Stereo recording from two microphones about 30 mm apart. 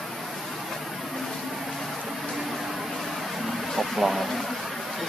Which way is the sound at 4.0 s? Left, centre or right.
Centre.